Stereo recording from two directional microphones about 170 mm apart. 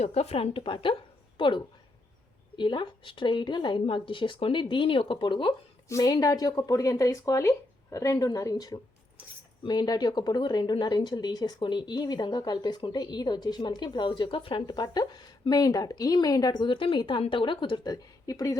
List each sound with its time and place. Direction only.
0.0 s a woman's voice: 40° left (ahead or behind); by 18.5 s 20° left (ahead or behind)